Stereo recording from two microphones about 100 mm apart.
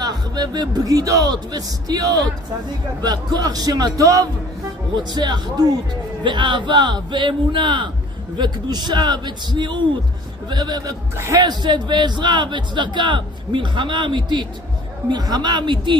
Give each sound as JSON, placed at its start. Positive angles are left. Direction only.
{"t": 0.0, "sound": "speech", "side_deg": -40}
{"t": 4.9, "sound": "a man's voice", "side_deg": -45}
{"t": 11.1, "sound": "speech", "side_deg": -30}
{"t": 11.4, "sound": "a man's voice", "side_deg": -50}